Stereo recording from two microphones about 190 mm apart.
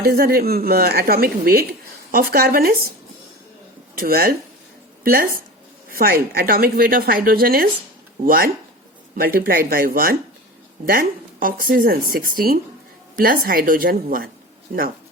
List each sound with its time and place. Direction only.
0.0 s a woman's voice: 55° right (ahead or behind)
3.9 s a woman's voice: 50° right (ahead or behind)